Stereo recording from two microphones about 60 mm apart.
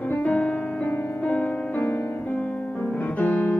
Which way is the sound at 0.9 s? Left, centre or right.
Left.